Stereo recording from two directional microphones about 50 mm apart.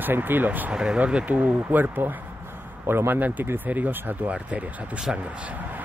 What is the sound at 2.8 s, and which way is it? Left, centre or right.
Speech, right.